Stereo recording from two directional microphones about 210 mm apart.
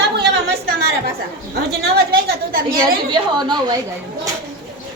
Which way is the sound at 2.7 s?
20° right (ahead or behind).